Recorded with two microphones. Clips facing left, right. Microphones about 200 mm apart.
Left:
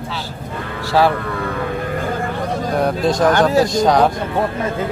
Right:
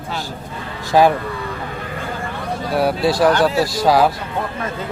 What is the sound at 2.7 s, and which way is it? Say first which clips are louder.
Speech: right 1 dB; 5° right (ahead or behind).